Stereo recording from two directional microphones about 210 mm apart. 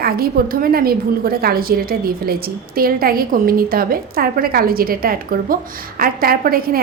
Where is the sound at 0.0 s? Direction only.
45° right (ahead or behind).